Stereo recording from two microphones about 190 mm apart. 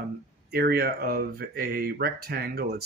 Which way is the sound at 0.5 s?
55° right (ahead or behind).